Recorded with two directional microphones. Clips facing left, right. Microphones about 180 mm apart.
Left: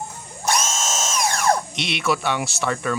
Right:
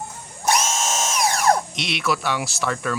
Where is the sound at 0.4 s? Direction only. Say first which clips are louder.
Right 2 dB; 15° right (ahead or behind).